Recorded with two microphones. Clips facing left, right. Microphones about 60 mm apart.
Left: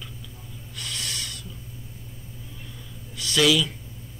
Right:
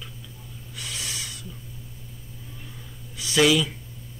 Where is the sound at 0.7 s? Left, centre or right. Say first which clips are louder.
Left 1 dB; centre.